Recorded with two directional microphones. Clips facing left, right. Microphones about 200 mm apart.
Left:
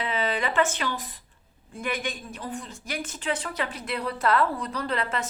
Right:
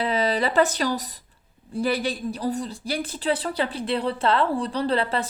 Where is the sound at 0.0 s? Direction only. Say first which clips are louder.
Right 5 dB; 35° right (ahead or behind).